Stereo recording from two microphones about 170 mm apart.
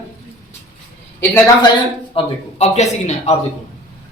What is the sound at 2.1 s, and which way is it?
A man's voice, 40° left (ahead or behind).